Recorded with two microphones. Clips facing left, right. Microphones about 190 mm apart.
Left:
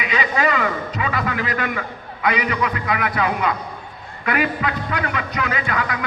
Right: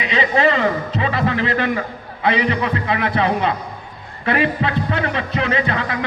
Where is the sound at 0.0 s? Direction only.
25° right (ahead or behind).